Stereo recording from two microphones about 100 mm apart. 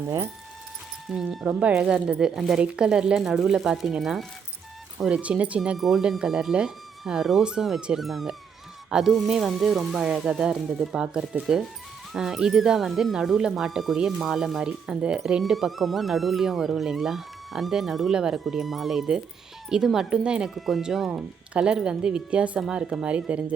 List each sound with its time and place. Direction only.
1.0 s speech: 5° right (ahead or behind)